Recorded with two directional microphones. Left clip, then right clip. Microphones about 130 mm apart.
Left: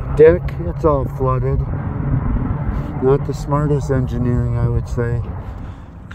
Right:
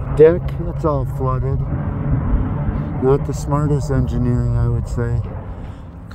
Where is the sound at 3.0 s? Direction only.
15° right (ahead or behind).